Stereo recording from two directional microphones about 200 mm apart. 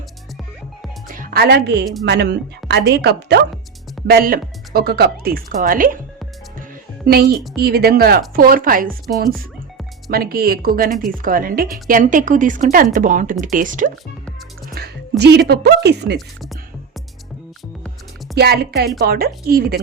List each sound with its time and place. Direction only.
1.0 s music: 45° right (ahead or behind)
2.0 s a woman's voice: 55° right (ahead or behind)
7.1 s a woman's voice: 50° right (ahead or behind)
10.1 s a woman's voice: 50° right (ahead or behind)
14.8 s music: 50° right (ahead or behind)
15.2 s a woman's voice: 55° right (ahead or behind)
16.1 s speech: centre (ahead or behind)
18.3 s a woman's voice: 50° right (ahead or behind)